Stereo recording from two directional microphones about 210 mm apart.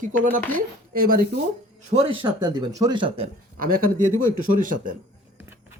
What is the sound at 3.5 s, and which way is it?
A woman's voice, 40° right (ahead or behind).